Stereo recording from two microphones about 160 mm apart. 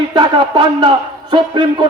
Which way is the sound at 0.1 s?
30° right (ahead or behind).